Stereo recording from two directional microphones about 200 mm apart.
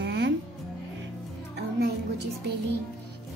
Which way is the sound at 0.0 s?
55° right (ahead or behind).